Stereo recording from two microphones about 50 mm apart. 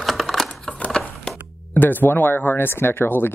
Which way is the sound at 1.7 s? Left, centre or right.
Left.